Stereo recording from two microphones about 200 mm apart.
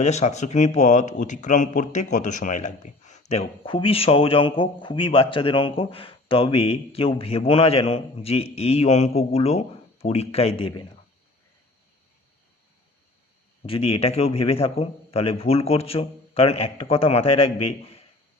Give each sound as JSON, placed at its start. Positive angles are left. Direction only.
{"t": 0.0, "sound": "speech", "side_deg": 35}
{"t": 13.7, "sound": "a man's voice", "side_deg": 30}